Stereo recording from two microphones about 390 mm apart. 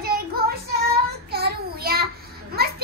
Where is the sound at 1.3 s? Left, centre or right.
Right.